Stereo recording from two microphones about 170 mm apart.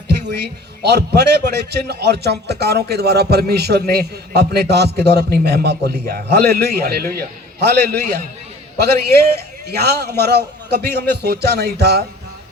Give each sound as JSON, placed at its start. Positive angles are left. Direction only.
{"t": 0.1, "sound": "a man's voice", "side_deg": -75}